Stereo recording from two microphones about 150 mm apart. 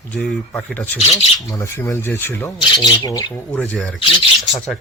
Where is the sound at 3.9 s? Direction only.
35° left (ahead or behind).